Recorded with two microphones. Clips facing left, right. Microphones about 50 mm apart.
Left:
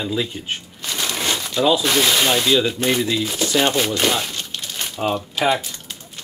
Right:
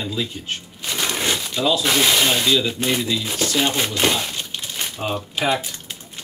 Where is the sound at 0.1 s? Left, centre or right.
Centre.